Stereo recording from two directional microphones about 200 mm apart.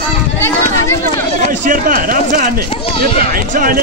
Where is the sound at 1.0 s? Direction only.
40° right (ahead or behind).